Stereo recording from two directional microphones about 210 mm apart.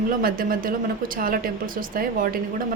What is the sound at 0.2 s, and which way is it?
A woman's voice, 45° right (ahead or behind).